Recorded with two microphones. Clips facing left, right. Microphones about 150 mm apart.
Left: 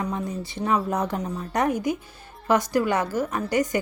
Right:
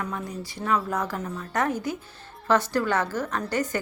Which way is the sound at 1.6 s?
15° left (ahead or behind).